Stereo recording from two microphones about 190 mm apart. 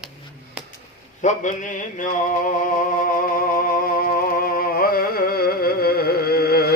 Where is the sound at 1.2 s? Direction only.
40° left (ahead or behind).